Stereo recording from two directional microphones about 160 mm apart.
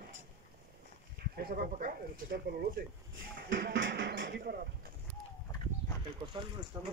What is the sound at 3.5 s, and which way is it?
Speech, 90° right.